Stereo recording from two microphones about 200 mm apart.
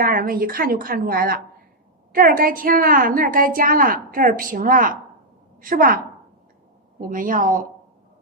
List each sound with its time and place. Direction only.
0.0 s a woman's voice: 45° right (ahead or behind)
7.1 s a woman's voice: 40° right (ahead or behind)